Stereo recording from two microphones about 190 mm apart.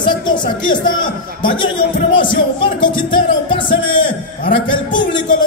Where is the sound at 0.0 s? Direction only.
25° left (ahead or behind).